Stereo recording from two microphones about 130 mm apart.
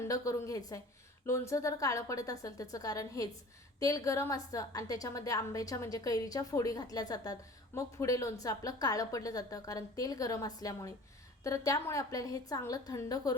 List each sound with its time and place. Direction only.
0.0 s a woman's voice: 25° left (ahead or behind)